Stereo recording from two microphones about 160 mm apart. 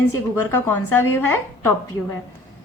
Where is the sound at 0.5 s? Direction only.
15° left (ahead or behind).